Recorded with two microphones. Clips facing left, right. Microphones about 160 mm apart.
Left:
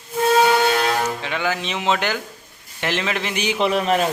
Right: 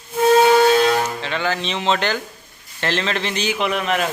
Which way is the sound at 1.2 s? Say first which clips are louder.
Right 1 dB; 10° left (ahead or behind).